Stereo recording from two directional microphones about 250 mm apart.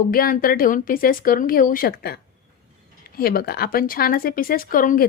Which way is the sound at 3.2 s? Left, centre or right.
Left.